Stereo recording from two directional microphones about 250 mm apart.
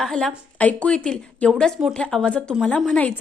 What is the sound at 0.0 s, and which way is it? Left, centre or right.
A woman's voice, centre.